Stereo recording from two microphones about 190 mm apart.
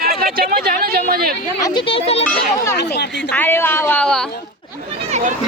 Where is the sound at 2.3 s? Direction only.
15° left (ahead or behind).